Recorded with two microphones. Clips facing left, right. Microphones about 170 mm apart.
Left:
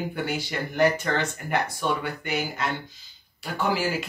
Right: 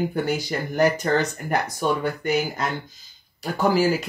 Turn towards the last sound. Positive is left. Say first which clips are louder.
# right 6 dB
turn(degrees=-40)  # may be behind; listen again after turning